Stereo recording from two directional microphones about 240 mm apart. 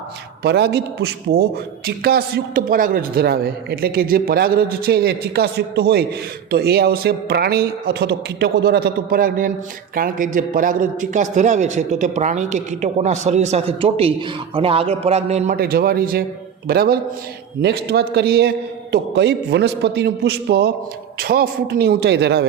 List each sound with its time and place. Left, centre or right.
0.4 s a man's voice: right